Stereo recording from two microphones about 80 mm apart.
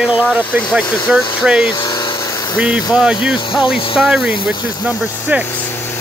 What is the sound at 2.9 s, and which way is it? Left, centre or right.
Speech, centre.